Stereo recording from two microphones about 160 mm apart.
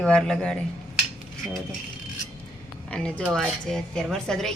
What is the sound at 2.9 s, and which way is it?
A woman's voice, 5° left (ahead or behind).